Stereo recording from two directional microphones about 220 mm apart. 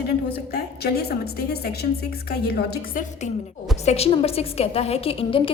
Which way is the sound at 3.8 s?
30° left (ahead or behind).